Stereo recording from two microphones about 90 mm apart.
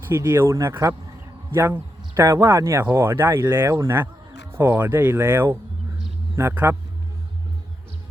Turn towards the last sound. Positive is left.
turn(degrees=-35)  # may be behind; listen again after turning